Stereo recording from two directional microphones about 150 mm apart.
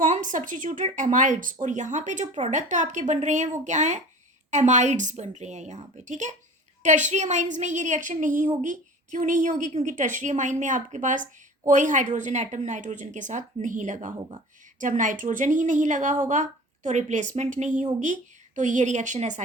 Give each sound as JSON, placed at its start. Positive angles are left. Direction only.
{"t": 0.0, "sound": "a woman's voice", "side_deg": -60}
{"t": 14.2, "sound": "speech", "side_deg": -35}
{"t": 14.8, "sound": "a woman's voice", "side_deg": -60}